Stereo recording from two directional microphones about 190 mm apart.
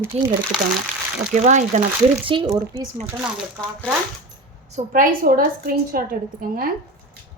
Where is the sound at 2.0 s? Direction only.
25° right (ahead or behind).